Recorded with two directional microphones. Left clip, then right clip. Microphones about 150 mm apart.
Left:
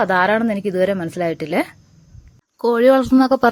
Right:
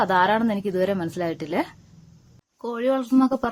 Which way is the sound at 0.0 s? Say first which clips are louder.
Left 4 dB; 20° left (ahead or behind).